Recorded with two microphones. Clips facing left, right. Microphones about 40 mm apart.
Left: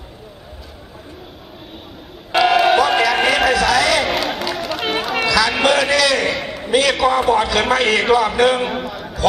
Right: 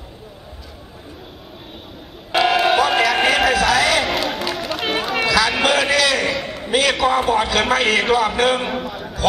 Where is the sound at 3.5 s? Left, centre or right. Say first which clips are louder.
Left 1 dB; right.